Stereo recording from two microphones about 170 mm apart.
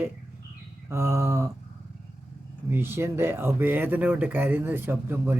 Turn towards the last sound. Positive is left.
turn(degrees=-10)  # may be behind; listen again after turning